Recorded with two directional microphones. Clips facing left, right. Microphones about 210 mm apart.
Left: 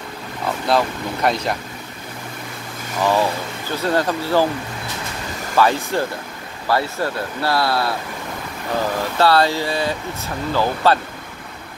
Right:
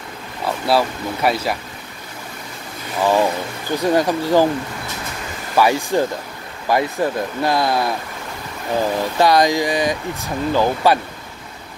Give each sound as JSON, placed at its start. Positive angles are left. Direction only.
{"t": 0.7, "sound": "speech", "side_deg": -5}
{"t": 3.0, "sound": "speech", "side_deg": -15}
{"t": 5.6, "sound": "speech", "side_deg": -15}
{"t": 9.2, "sound": "speech", "side_deg": -15}